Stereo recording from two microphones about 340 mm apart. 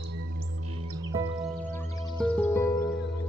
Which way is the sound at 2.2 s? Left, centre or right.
Centre.